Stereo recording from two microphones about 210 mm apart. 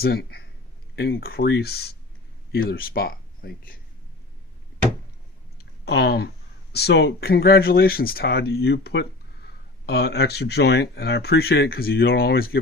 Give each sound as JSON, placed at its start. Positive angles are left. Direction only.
{"t": 0.0, "sound": "speech", "side_deg": 50}
{"t": 5.8, "sound": "speech", "side_deg": 50}